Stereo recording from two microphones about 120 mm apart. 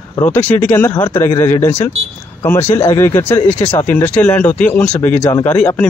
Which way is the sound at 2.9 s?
20° left (ahead or behind).